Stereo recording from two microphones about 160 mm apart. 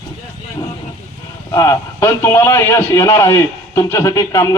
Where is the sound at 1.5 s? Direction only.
20° left (ahead or behind).